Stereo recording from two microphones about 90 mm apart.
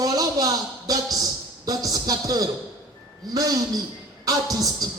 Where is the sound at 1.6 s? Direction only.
45° right (ahead or behind).